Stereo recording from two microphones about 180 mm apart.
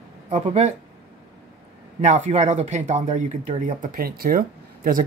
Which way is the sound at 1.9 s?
40° right (ahead or behind).